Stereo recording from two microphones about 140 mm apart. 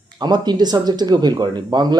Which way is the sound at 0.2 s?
30° right (ahead or behind).